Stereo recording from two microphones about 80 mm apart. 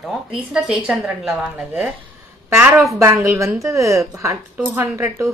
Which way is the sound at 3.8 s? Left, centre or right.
Centre.